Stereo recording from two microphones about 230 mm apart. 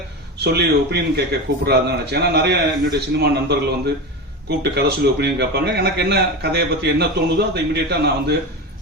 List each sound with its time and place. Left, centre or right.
0.3 s a man's voice: right